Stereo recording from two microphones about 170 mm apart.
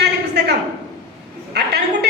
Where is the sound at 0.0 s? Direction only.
75° right (ahead or behind).